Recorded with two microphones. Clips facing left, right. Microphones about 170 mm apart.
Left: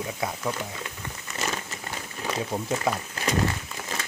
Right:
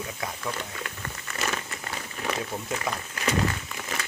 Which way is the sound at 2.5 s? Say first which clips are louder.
Left 4 dB; 20° left (ahead or behind).